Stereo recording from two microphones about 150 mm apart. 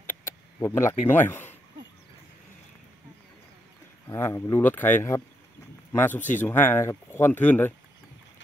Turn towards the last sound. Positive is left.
turn(degrees=15)  # may be behind; listen again after turning